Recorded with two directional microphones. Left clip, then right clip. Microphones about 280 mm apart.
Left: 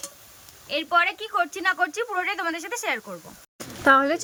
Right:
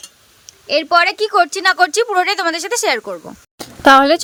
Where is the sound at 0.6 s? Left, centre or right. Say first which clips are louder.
Right 9 dB; centre.